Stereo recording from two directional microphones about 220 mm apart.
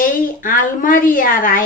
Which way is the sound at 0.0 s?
40° left (ahead or behind).